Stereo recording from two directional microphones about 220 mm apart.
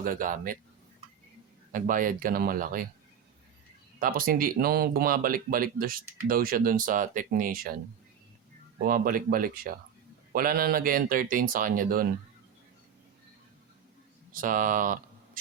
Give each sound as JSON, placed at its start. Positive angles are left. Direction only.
{"t": 0.0, "sound": "speech", "side_deg": -40}
{"t": 1.7, "sound": "speech", "side_deg": -40}
{"t": 4.0, "sound": "speech", "side_deg": -40}
{"t": 8.8, "sound": "speech", "side_deg": -40}
{"t": 14.4, "sound": "speech", "side_deg": -40}